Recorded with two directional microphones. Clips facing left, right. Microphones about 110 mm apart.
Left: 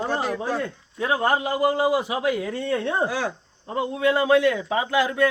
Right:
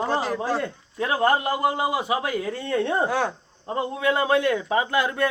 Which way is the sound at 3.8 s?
50° right (ahead or behind).